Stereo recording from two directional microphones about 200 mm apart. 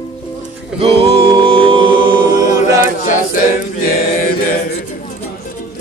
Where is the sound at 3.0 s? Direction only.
40° left (ahead or behind).